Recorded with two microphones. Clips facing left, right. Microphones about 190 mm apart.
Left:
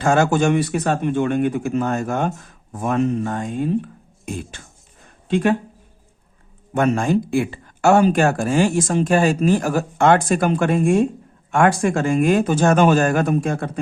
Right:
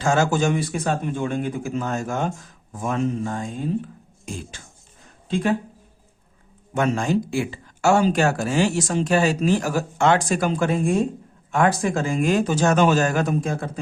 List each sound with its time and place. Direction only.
0.0 s speech: 60° left (ahead or behind)
6.7 s speech: 55° left (ahead or behind)